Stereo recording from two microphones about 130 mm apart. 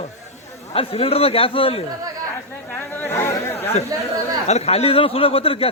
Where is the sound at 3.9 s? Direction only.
30° right (ahead or behind).